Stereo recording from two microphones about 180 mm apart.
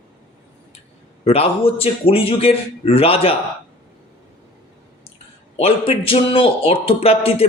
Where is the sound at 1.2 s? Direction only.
35° left (ahead or behind).